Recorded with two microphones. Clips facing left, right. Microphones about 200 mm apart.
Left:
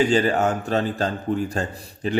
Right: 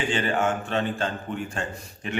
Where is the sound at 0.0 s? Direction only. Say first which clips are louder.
Left 6 dB; 40° left (ahead or behind).